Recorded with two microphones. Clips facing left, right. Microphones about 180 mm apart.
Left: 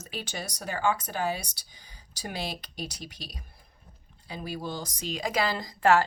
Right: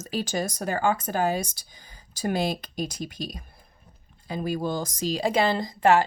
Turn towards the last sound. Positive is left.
turn(degrees=-20)  # may be behind; listen again after turning